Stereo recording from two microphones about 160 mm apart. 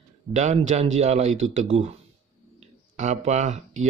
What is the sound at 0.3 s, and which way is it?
Speech, 45° right (ahead or behind).